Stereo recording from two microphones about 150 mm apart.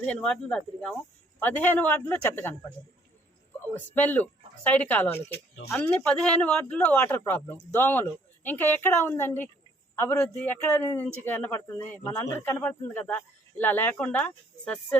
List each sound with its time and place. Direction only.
0.0 s a man's voice: 5° left (ahead or behind)
3.7 s a man's voice: 10° left (ahead or behind)